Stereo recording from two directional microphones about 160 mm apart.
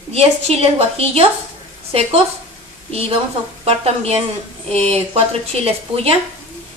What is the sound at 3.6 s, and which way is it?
A woman's voice, 40° right (ahead or behind).